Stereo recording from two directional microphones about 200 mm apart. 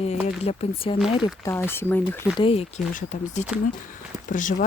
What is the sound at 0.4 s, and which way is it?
Speech, 30° left (ahead or behind).